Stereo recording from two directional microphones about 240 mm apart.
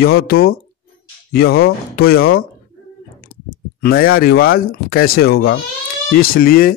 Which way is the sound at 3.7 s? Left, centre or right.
Left.